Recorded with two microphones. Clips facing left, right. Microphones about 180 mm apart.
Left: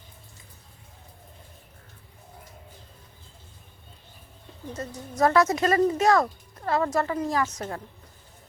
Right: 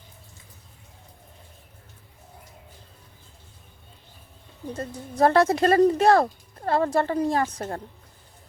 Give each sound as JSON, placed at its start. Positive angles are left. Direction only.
{"t": 4.7, "sound": "speech", "side_deg": -30}